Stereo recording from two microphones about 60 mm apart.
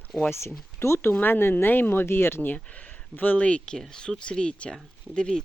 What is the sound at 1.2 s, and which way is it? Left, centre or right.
Speech, left.